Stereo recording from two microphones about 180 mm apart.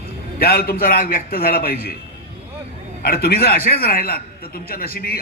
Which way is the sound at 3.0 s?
55° left (ahead or behind).